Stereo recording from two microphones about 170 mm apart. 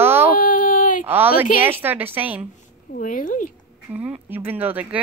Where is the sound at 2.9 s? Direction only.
50° left (ahead or behind).